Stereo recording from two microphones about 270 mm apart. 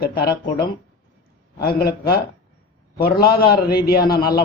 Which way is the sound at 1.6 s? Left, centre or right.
Left.